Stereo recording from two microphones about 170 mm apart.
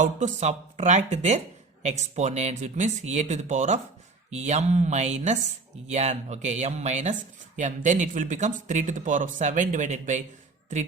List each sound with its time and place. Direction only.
0.0 s speech: 45° right (ahead or behind)